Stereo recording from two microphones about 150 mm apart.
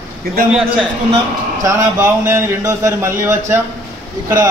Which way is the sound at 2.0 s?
15° right (ahead or behind).